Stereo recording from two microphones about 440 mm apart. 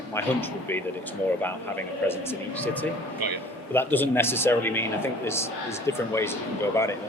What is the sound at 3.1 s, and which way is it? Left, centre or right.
Speech, right.